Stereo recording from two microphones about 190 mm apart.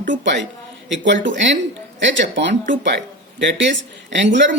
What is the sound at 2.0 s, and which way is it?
Speech, 70° right (ahead or behind).